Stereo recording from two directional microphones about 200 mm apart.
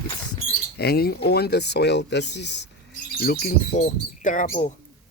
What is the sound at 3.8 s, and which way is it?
Speech, 40° left (ahead or behind).